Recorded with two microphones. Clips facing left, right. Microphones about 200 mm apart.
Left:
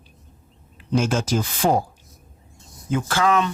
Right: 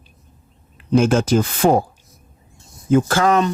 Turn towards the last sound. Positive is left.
turn(degrees=-40)  # may be behind; listen again after turning